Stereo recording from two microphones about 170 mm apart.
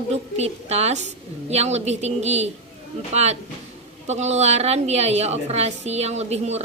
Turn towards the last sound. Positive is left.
turn(degrees=-40)  # may be behind; listen again after turning